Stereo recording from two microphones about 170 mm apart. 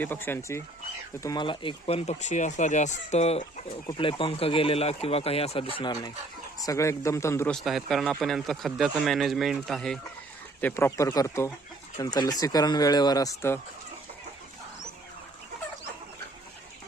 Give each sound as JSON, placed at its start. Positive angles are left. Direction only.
{"t": 0.0, "sound": "speech", "side_deg": 10}
{"t": 1.2, "sound": "speech", "side_deg": 25}
{"t": 7.5, "sound": "speech", "side_deg": 0}